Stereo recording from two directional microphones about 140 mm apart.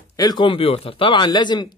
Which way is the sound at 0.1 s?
30° left (ahead or behind).